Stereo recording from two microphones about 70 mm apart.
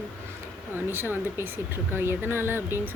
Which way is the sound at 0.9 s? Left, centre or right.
Right.